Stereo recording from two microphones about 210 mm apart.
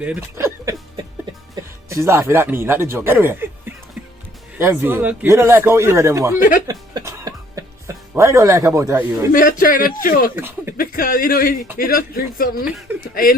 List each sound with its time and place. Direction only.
0.0 s music: 10° right (ahead or behind)
1.9 s speech: 15° right (ahead or behind)
4.5 s speech: 10° right (ahead or behind)
6.7 s music: 15° right (ahead or behind)
9.3 s speech: 40° left (ahead or behind)
10.3 s speech: 10° right (ahead or behind)
10.8 s speech: 40° left (ahead or behind)
12.9 s chuckle: 10° right (ahead or behind)